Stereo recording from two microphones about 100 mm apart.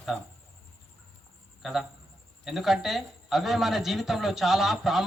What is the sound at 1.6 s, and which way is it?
Speech, 5° right (ahead or behind).